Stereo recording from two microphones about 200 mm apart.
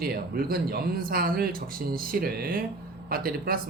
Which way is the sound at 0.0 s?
50° right (ahead or behind).